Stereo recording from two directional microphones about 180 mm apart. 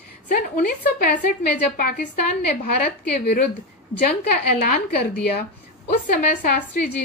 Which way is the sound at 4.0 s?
50° left (ahead or behind).